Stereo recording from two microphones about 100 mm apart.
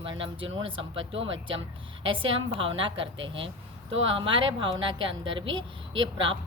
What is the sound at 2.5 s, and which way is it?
A woman's voice, 65° right (ahead or behind).